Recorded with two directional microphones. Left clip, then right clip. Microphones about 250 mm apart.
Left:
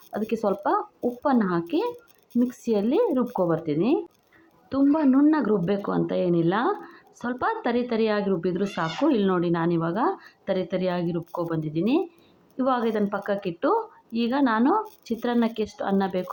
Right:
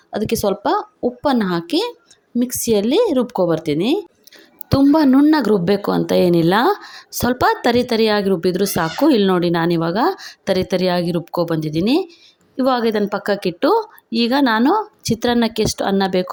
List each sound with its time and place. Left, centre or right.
0.1 s a woman's voice: right